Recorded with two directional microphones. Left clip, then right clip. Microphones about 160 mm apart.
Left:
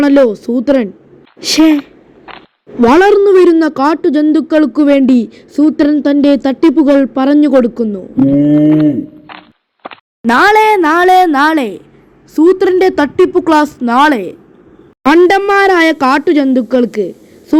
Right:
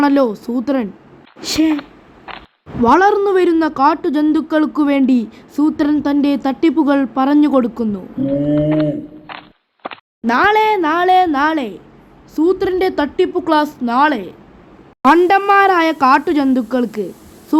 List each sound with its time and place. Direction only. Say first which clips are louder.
0.0 s a woman's voice: left 6 dB; 15° left (ahead or behind)
8.5 s speech: left 7 dB; centre (ahead or behind)
9.8 s plop: even; centre (ahead or behind)
10.2 s a woman's voice: left 5 dB; 35° left (ahead or behind)
15.0 s a woman's voice: left 3 dB; 25° left (ahead or behind)